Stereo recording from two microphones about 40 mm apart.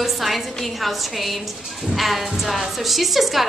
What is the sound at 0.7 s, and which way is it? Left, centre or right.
A woman's voice, centre.